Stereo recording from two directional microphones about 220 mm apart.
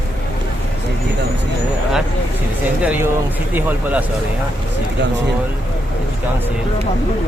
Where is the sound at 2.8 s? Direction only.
5° right (ahead or behind).